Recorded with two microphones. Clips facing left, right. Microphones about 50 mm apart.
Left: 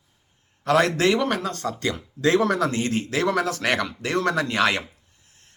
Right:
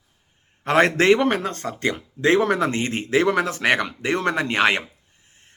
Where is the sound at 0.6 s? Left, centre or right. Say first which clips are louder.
Right 2 dB; right.